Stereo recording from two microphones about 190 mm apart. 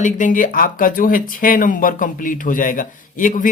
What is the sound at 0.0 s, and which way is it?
Speech, 45° left (ahead or behind).